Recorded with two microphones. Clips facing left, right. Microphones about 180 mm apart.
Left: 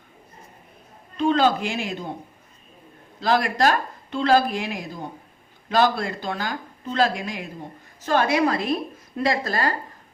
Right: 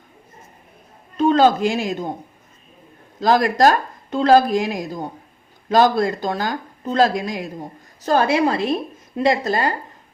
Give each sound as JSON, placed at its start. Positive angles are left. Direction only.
{"t": 1.1, "sound": "a man's voice", "side_deg": -40}
{"t": 3.2, "sound": "a woman's voice", "side_deg": -40}